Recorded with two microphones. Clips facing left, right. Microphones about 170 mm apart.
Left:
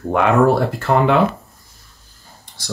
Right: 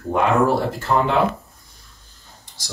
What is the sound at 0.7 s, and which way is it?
Speech, 65° left (ahead or behind).